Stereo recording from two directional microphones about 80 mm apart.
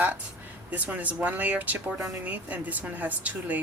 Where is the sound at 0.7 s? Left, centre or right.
Centre.